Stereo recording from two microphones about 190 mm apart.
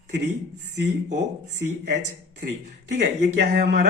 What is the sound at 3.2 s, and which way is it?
Speech, 60° right (ahead or behind).